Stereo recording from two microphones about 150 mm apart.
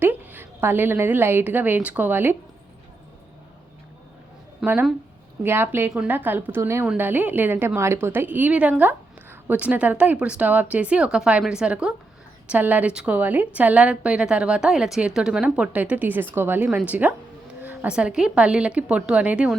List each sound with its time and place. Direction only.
0.0 s a woman's voice: 15° right (ahead or behind)
4.6 s a woman's voice: 10° right (ahead or behind)